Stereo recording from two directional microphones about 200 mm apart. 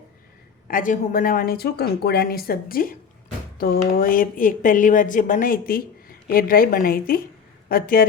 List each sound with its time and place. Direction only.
0.7 s speech: 45° left (ahead or behind)